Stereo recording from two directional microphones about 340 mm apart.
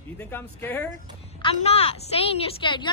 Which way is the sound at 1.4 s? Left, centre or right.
Centre.